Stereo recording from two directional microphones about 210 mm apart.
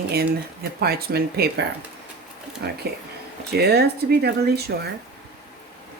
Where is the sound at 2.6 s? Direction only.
50° right (ahead or behind).